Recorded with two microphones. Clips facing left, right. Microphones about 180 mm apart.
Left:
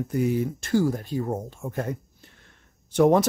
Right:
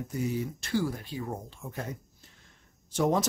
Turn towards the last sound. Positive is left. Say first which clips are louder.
# left 8 dB
turn(degrees=60)  # may be behind; listen again after turning